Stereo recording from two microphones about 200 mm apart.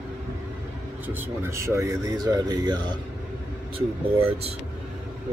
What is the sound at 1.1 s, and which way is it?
Speech, 10° right (ahead or behind).